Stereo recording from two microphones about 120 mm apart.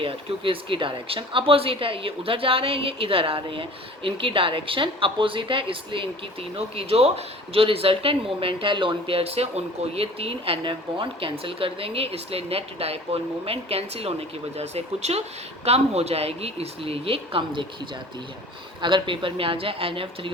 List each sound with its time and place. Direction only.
0.0 s speech: 45° right (ahead or behind)
18.8 s speech: 40° right (ahead or behind)